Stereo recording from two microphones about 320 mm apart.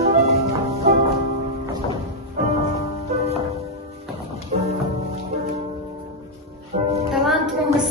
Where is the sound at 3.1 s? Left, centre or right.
Centre.